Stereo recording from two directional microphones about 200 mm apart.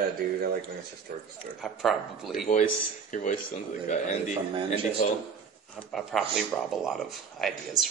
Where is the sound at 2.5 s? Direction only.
40° left (ahead or behind).